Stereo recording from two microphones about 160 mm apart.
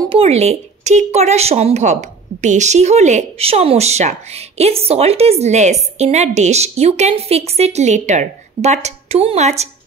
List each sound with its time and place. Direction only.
0.1 s speech: 40° right (ahead or behind)